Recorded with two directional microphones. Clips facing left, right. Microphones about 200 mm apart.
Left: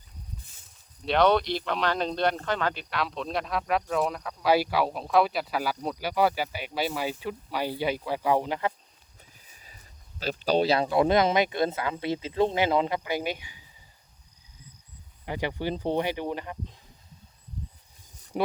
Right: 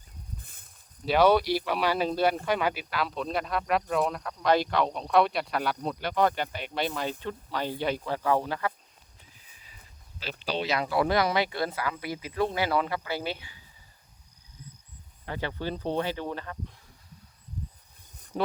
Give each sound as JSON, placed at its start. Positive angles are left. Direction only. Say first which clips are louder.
{"t": 0.3, "sound": "snake", "louder": "even", "side_deg": -55}
{"t": 1.0, "sound": "speech", "louder": "right 1 dB", "side_deg": -5}
{"t": 10.2, "sound": "speech", "louder": "left 8 dB", "side_deg": 45}
{"t": 15.3, "sound": "speech", "louder": "left 3 dB", "side_deg": 15}
{"t": 18.3, "sound": "speech", "louder": "left 2 dB", "side_deg": 15}